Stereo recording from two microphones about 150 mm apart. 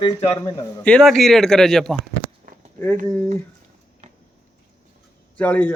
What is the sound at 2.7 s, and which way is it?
Speech, 15° left (ahead or behind).